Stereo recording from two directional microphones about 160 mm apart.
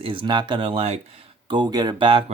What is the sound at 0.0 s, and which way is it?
Speech, 30° right (ahead or behind).